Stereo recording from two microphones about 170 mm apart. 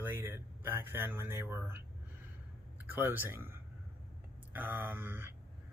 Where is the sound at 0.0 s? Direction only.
10° right (ahead or behind).